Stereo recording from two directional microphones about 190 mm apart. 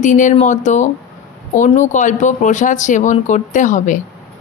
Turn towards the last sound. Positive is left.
turn(degrees=40)  # may be behind; listen again after turning